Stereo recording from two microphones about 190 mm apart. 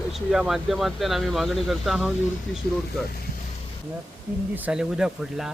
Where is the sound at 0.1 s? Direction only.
Centre (ahead or behind).